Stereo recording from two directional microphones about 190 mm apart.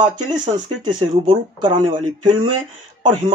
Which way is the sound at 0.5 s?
25° right (ahead or behind).